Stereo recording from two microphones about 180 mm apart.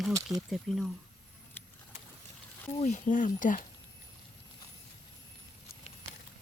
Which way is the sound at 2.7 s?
40° left (ahead or behind).